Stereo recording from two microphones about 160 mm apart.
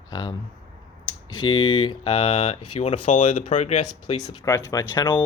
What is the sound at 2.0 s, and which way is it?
Speech, 35° left (ahead or behind).